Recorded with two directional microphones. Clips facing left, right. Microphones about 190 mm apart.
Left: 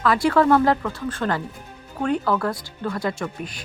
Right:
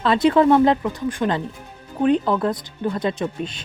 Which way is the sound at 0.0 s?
20° right (ahead or behind).